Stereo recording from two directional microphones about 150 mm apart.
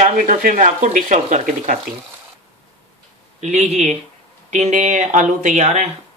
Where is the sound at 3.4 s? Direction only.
50° right (ahead or behind).